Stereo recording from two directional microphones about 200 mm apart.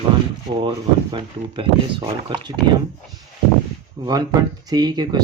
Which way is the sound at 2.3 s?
25° right (ahead or behind).